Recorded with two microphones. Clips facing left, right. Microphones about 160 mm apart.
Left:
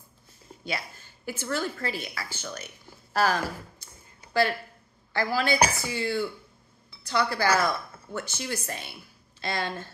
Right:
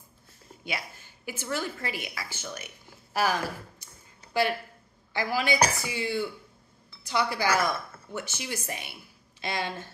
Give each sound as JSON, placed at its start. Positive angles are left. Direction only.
{"t": 0.7, "sound": "a woman's voice", "side_deg": -15}